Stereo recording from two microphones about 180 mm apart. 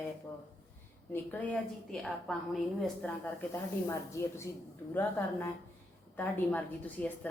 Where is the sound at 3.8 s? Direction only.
15° left (ahead or behind).